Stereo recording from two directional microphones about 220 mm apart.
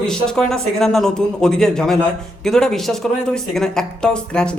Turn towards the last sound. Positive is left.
turn(degrees=5)  # may be behind; listen again after turning